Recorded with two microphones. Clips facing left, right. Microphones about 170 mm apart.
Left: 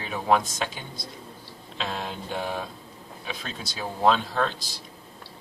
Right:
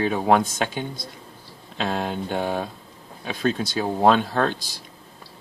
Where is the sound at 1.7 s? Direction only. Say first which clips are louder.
Right 7 dB; 60° right (ahead or behind).